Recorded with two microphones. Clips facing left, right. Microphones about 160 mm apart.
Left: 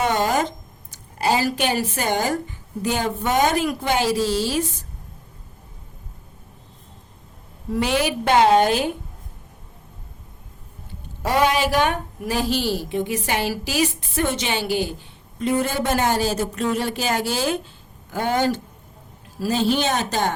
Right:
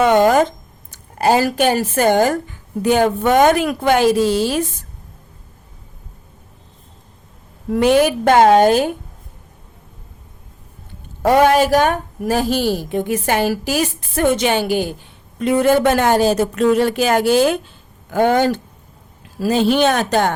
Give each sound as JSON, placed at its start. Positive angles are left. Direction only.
{"t": 0.0, "sound": "a sound", "side_deg": -60}
{"t": 0.9, "sound": "a woman's voice", "side_deg": -50}
{"t": 7.7, "sound": "a woman's voice", "side_deg": -50}
{"t": 11.2, "sound": "a woman's voice", "side_deg": -50}
{"t": 15.4, "sound": "a woman's voice", "side_deg": -65}